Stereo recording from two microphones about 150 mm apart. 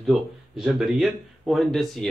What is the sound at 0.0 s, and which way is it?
Speech, centre (ahead or behind).